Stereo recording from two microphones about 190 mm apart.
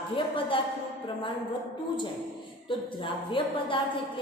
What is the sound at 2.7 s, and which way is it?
A woman's voice, 25° left (ahead or behind).